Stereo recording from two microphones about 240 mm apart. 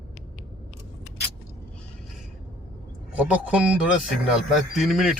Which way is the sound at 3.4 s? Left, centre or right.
Centre.